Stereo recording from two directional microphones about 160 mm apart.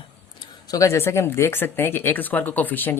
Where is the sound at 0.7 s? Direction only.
20° left (ahead or behind).